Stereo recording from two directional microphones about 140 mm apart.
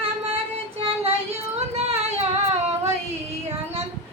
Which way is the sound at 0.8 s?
45° right (ahead or behind).